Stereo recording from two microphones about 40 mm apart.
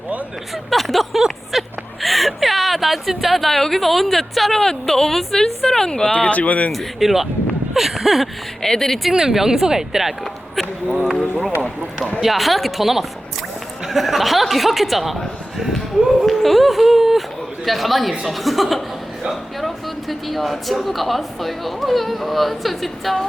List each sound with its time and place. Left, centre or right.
0.5 s speech: centre
1.5 s a sound: centre
4.6 s speech: centre
6.2 s speech: left
6.7 s speech: centre
8.6 s speech: centre
9.1 s a woman's voice: centre
12.2 s speech: centre
16.0 s a sound: centre
17.7 s speech: centre